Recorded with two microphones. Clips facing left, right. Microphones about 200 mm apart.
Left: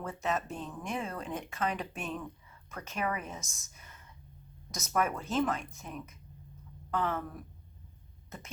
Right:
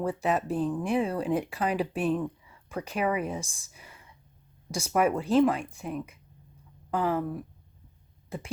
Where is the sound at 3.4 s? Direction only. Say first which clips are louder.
Right 10 dB; 30° right (ahead or behind).